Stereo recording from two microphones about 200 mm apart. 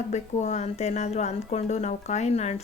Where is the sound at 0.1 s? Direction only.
35° left (ahead or behind).